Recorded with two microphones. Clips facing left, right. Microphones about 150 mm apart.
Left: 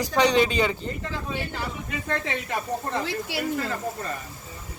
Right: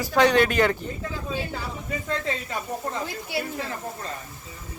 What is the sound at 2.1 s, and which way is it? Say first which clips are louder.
Speech: left 1 dB; 75° left (ahead or behind).